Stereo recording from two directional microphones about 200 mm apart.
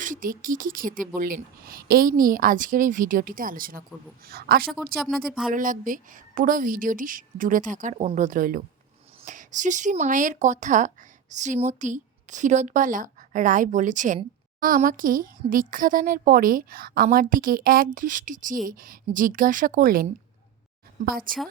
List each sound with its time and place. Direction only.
0.0 s speech: 40° right (ahead or behind)
4.9 s speech: centre (ahead or behind)
5.5 s a woman's voice: 40° right (ahead or behind)